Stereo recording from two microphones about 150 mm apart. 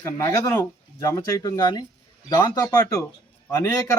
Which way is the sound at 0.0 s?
20° left (ahead or behind).